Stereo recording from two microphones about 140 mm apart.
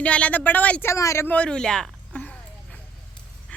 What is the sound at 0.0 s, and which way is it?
Speech, 10° left (ahead or behind).